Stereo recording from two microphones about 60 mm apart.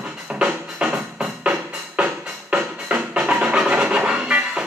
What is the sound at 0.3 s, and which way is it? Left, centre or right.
Music, centre.